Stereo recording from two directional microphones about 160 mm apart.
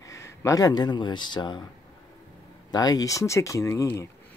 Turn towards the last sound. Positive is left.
turn(degrees=15)  # may be behind; listen again after turning